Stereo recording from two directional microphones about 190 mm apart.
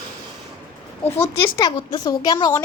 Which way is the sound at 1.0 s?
15° left (ahead or behind).